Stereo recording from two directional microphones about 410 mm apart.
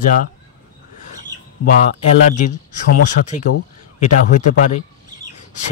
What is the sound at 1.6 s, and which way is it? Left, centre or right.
Speech, centre.